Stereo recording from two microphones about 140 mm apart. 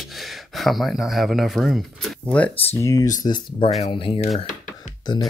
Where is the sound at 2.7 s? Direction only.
20° left (ahead or behind); by 4.1 s 40° left (ahead or behind).